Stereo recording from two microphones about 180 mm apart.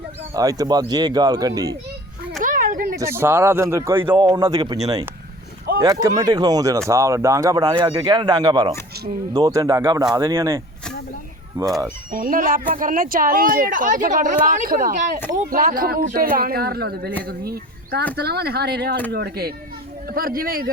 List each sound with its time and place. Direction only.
0.3 s speech: 20° right (ahead or behind)
2.4 s a sound: 50° right (ahead or behind)
3.0 s speech: 15° right (ahead or behind)
5.8 s speech: 20° right (ahead or behind)
12.1 s speech: 50° right (ahead or behind)